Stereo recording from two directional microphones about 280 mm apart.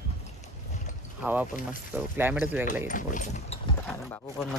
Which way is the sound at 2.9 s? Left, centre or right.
Left.